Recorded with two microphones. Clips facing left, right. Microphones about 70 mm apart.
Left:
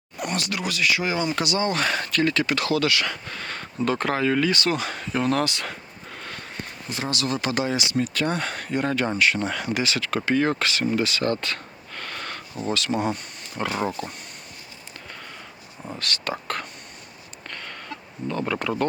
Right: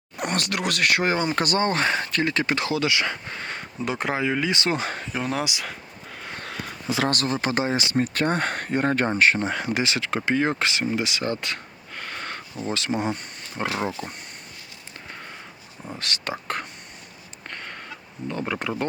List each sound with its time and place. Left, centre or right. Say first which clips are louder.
0.2 s speech: right 2 dB; right
5.1 s speech: left 6 dB; centre
7.3 s speech: right 1 dB; right
10.8 s a sound: left 2 dB; centre
12.7 s speech: left 1 dB; right
16.0 s speech: left 1 dB; right
17.5 s a sound: right 1 dB; right
18.3 s speech: left 2 dB; right